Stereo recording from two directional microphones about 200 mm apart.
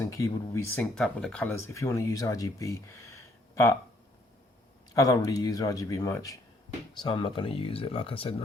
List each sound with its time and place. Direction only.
0.0 s speech: 15° left (ahead or behind)
4.9 s speech: 15° left (ahead or behind)